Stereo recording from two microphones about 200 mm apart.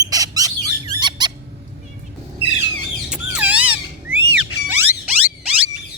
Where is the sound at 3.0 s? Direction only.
5° right (ahead or behind).